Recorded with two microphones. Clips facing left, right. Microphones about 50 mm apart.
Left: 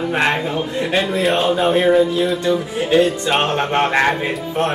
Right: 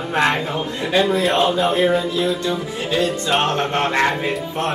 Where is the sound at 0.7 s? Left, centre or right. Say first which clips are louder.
Right 2 dB; left.